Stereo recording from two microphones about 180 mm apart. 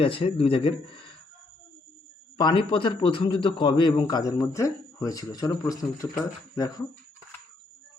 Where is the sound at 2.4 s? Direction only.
30° left (ahead or behind).